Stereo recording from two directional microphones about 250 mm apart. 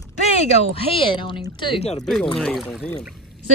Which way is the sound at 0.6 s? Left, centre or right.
Left.